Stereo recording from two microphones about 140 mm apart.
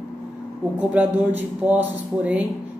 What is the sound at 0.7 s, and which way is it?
Speech, 10° right (ahead or behind).